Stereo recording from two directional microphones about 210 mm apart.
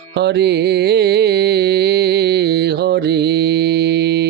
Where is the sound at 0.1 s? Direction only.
50° right (ahead or behind).